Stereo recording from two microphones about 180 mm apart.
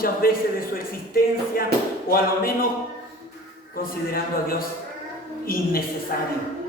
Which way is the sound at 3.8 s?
55° left (ahead or behind).